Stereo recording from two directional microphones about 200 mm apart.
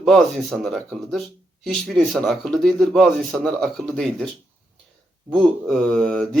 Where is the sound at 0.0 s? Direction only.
Centre (ahead or behind).